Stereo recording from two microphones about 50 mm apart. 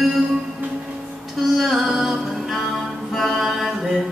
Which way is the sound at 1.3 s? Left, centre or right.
Centre.